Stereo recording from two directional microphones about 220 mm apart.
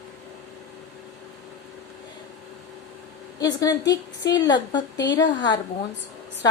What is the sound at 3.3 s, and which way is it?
A woman's voice, 15° left (ahead or behind).